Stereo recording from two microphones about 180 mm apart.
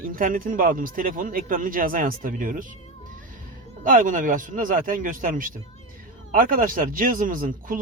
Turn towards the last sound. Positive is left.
turn(degrees=-50)  # may be behind; listen again after turning